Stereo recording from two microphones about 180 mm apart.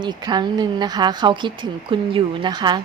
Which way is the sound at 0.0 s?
25° right (ahead or behind).